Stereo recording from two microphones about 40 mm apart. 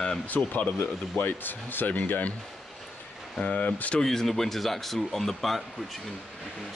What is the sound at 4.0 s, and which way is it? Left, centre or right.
Speech, centre.